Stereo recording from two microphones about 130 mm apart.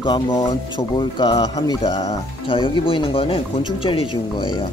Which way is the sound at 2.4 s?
40° left (ahead or behind).